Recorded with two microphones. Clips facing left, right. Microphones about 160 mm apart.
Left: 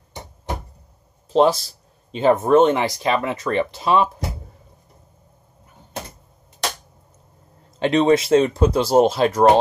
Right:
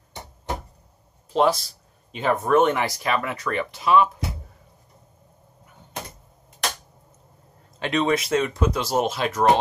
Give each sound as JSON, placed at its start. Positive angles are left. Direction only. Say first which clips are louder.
{"t": 1.3, "sound": "speech", "louder": "left 4 dB", "side_deg": 30}
{"t": 7.8, "sound": "speech", "louder": "left 6 dB", "side_deg": 30}